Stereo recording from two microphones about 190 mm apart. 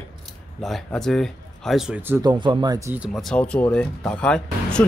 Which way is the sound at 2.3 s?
25° right (ahead or behind).